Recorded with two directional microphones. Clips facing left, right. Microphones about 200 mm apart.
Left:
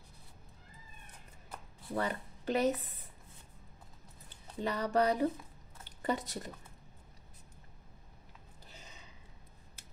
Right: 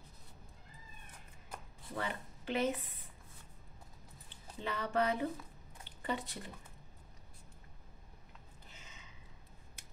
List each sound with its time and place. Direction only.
1.9 s speech: 40° left (ahead or behind)
4.3 s speech: 40° left (ahead or behind)
8.6 s a sound: 35° left (ahead or behind)